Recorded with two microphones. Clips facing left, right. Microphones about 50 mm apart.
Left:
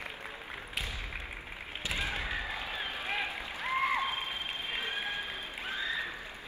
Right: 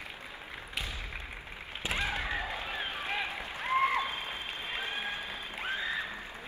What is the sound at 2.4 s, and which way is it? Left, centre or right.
Run, right.